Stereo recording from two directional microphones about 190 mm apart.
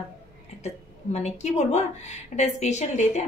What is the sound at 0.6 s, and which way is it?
A woman's voice, 35° left (ahead or behind).